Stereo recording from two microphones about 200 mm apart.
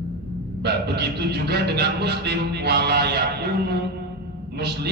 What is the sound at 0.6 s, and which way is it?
A man's voice, 55° right (ahead or behind).